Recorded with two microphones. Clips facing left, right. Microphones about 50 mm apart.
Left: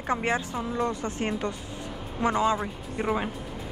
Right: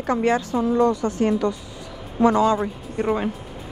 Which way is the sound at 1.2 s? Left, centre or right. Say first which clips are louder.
Right 9 dB; left.